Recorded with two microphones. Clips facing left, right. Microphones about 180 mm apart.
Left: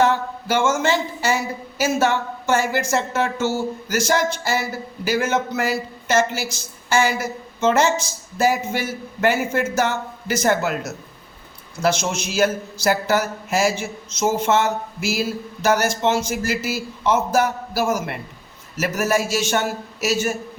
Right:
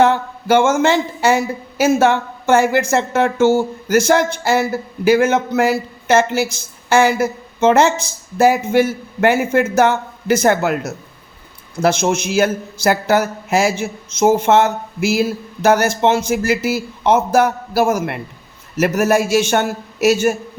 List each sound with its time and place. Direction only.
0.0 s a man's voice: 60° right (ahead or behind)